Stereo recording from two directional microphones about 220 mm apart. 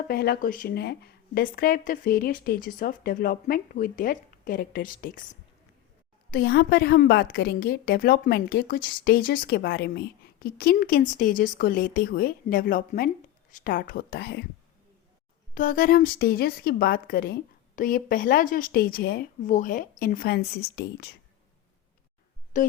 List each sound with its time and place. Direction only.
0.1 s a woman's voice: 45° left (ahead or behind)
15.5 s a woman's voice: 40° left (ahead or behind)
22.5 s a woman's voice: 35° left (ahead or behind)